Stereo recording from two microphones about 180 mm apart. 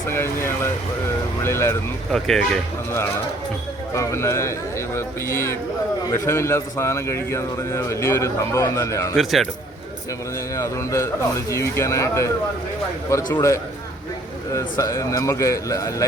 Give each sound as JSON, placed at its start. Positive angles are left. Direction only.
{"t": 0.1, "sound": "a man's voice", "side_deg": 15}
{"t": 2.1, "sound": "speech", "side_deg": 0}
{"t": 3.9, "sound": "a man's voice", "side_deg": 15}
{"t": 9.1, "sound": "speech", "side_deg": 0}
{"t": 10.5, "sound": "a man's voice", "side_deg": 15}
{"t": 13.3, "sound": "a man's voice", "side_deg": 15}